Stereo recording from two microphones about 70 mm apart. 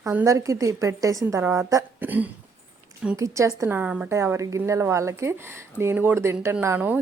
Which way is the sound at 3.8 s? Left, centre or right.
Centre.